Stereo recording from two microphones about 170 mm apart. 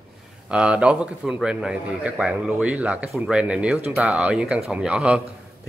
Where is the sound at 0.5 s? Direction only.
5° right (ahead or behind).